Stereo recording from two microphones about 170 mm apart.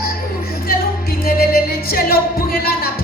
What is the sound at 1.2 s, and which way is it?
Music, 60° left (ahead or behind).